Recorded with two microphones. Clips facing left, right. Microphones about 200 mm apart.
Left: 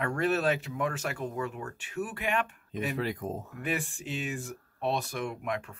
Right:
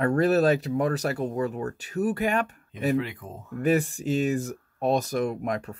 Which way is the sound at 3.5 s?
40° right (ahead or behind).